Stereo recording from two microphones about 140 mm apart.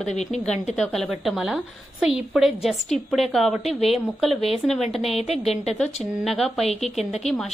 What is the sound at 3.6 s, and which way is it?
Speech, 50° left (ahead or behind).